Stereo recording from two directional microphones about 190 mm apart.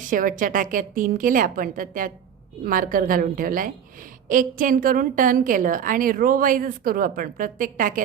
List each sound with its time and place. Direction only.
0.1 s a woman's voice: 45° right (ahead or behind)